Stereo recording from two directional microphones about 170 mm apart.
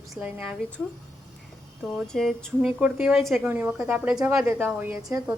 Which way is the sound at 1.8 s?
Centre (ahead or behind).